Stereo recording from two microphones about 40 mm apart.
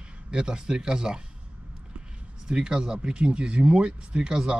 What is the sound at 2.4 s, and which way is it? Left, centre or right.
Speech, right.